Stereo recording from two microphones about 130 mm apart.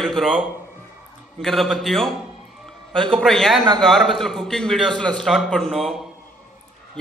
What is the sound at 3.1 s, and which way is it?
A man's voice, 5° left (ahead or behind).